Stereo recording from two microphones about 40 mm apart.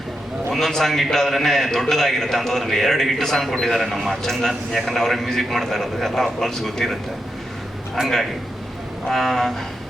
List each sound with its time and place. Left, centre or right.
0.5 s a man's voice: centre
9.0 s speech: centre